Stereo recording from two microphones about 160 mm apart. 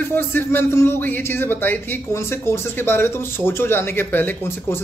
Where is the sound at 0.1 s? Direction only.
15° left (ahead or behind).